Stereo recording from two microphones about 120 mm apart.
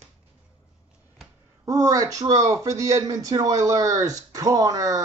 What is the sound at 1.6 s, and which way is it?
A man's voice, 30° right (ahead or behind).